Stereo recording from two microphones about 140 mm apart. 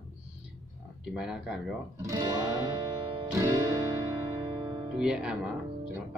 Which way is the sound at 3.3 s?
25° right (ahead or behind).